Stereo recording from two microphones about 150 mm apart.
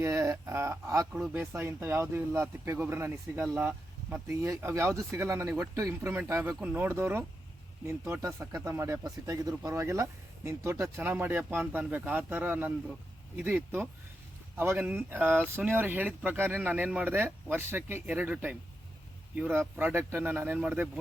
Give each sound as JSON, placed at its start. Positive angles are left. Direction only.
{"t": 0.0, "sound": "speech", "side_deg": -20}